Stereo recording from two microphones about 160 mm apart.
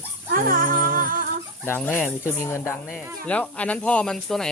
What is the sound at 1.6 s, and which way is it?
Speech, 15° left (ahead or behind).